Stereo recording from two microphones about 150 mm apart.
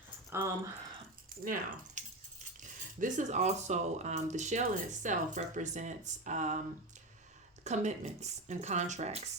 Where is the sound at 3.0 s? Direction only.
55° right (ahead or behind).